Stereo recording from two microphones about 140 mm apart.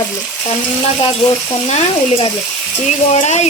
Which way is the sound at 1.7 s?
50° left (ahead or behind).